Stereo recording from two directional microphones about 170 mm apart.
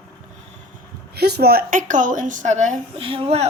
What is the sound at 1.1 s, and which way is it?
A woman's voice, 70° right (ahead or behind).